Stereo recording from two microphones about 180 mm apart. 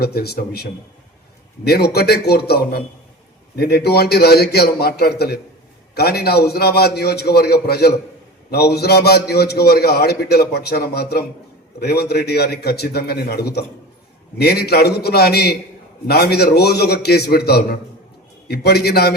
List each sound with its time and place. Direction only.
0.0 s a man's voice: 60° left (ahead or behind)